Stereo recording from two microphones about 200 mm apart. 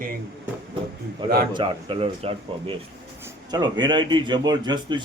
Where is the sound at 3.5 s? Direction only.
20° right (ahead or behind).